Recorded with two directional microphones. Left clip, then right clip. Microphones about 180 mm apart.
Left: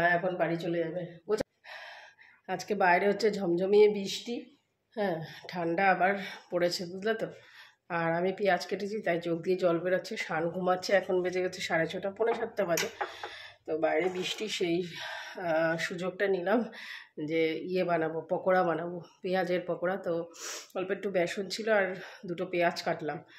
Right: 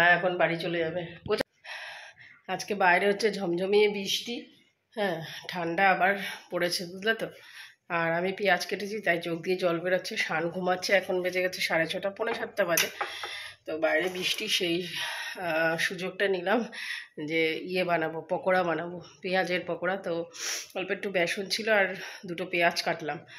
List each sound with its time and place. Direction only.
0.0 s a man's voice: 15° right (ahead or behind)
1.3 s a sound: centre (ahead or behind)
2.4 s speech: centre (ahead or behind)